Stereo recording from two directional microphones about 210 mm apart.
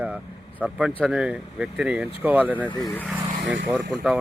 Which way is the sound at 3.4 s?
60° right (ahead or behind).